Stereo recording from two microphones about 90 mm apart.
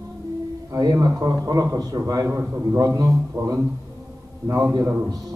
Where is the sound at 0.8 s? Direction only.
45° right (ahead or behind).